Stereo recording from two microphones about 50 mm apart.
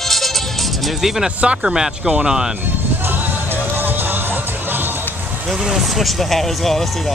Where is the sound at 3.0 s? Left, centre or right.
Right.